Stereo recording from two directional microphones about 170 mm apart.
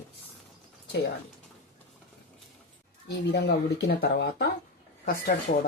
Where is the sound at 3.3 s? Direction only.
70° left (ahead or behind).